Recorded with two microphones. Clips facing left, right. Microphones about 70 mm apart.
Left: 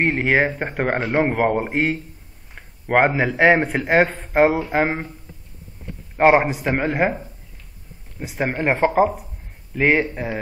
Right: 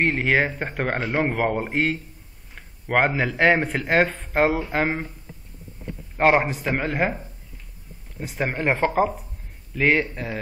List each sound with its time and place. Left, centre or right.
0.0 s speech: centre
2.5 s a sound: centre
3.1 s speech: centre
6.1 s speech: centre